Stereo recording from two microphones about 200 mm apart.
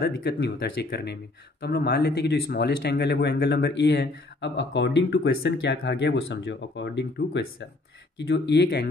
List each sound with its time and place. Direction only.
0.0 s speech: 55° left (ahead or behind)